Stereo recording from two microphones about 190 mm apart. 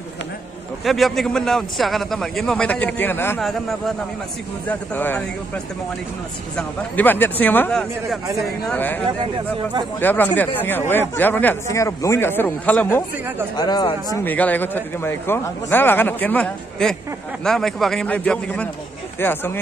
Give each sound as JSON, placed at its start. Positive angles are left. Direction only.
{"t": 0.8, "sound": "a man's voice", "side_deg": 0}
{"t": 4.6, "sound": "speech", "side_deg": 10}
{"t": 6.5, "sound": "speech", "side_deg": 10}
{"t": 13.6, "sound": "speech", "side_deg": 20}
{"t": 14.2, "sound": "a man's voice", "side_deg": 10}